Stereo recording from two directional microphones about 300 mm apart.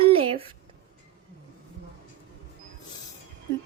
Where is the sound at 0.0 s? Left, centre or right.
Centre.